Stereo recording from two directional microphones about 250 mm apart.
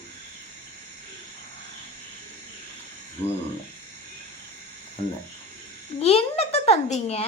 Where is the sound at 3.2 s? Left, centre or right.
Centre.